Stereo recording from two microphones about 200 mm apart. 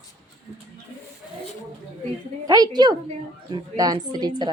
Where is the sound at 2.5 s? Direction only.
20° right (ahead or behind).